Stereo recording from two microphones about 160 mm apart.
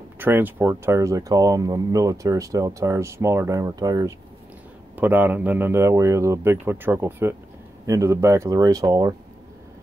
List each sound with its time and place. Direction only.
0.2 s speech: 10° right (ahead or behind)
4.9 s a man's voice: 10° right (ahead or behind)